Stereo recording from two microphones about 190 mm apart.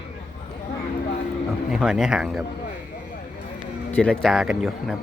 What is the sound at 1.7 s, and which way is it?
Speech, 5° right (ahead or behind).